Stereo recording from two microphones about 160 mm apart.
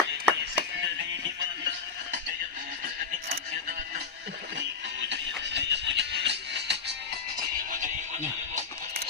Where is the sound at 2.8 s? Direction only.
70° right (ahead or behind).